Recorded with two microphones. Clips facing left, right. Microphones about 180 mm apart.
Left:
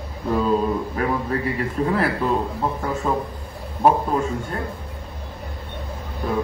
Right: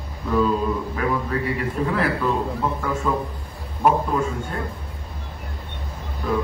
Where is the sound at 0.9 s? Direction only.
40° left (ahead or behind).